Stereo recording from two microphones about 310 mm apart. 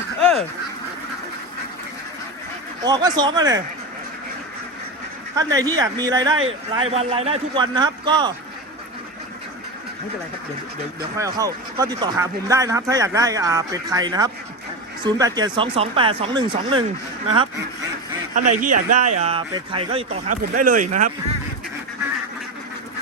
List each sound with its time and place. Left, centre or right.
0.2 s duck: centre
2.8 s speech: centre
5.4 s speech: centre
11.2 s speech: centre
18.3 s a man's voice: right